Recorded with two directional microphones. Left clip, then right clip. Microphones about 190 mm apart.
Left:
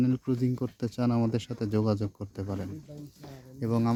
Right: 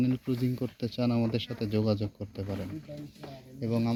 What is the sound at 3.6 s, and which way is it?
Speech, 25° left (ahead or behind).